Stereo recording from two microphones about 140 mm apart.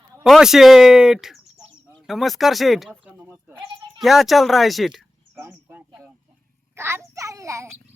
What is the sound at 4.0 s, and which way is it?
Speech, centre (ahead or behind).